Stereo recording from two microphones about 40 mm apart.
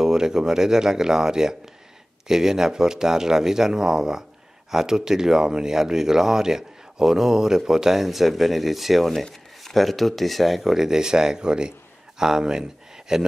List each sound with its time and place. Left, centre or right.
0.0 s speech: centre